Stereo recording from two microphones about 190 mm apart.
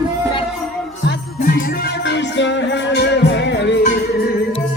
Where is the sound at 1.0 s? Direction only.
60° left (ahead or behind).